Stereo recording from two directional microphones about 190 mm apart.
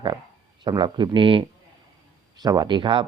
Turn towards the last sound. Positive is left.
turn(degrees=-25)  # may be behind; listen again after turning